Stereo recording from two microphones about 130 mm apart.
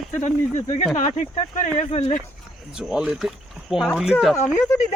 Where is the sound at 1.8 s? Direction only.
50° left (ahead or behind).